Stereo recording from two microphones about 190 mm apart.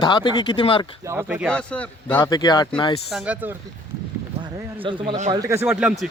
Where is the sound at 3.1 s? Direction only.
5° right (ahead or behind).